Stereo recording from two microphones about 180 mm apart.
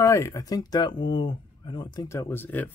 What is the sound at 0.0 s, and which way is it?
Speech, 15° left (ahead or behind).